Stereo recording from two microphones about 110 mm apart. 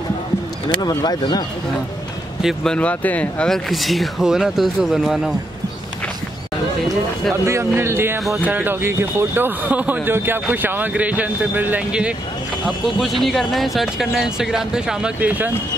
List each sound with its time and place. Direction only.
0.7 s speech: 40° left (ahead or behind)
2.4 s speech: 5° left (ahead or behind)
7.4 s speech: 25° right (ahead or behind)
12.6 s speech: centre (ahead or behind)